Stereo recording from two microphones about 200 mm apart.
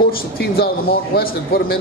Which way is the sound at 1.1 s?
50° left (ahead or behind).